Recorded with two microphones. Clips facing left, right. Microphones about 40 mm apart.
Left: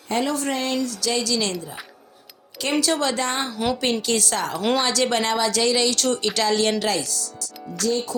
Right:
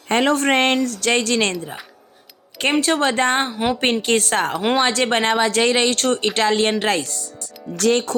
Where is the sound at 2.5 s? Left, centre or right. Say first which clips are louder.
Right 4 dB; right.